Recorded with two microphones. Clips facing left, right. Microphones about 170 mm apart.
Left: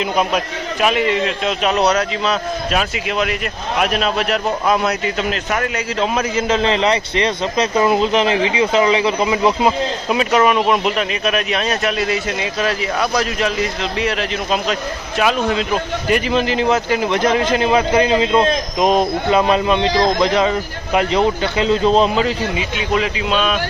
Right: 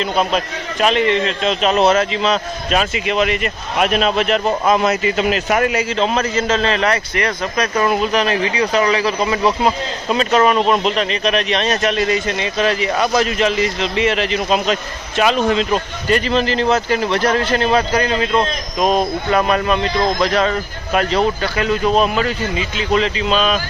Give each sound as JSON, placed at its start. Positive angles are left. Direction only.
{"t": 0.0, "sound": "a man's voice", "side_deg": 10}
{"t": 6.0, "sound": "a man's voice", "side_deg": 10}
{"t": 22.8, "sound": "a man's voice", "side_deg": 5}